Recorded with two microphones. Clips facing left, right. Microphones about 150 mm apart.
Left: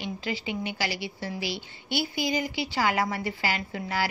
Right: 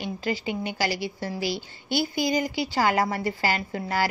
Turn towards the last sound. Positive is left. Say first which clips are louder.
# right 3 dB
turn(degrees=-45)  # may be behind; listen again after turning